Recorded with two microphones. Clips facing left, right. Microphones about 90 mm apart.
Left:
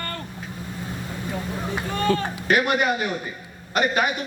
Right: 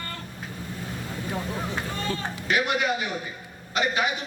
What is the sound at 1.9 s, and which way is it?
A man's voice, 60° left (ahead or behind).